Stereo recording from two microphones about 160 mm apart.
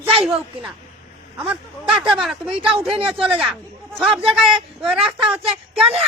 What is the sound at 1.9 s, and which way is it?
Speech, 5° right (ahead or behind).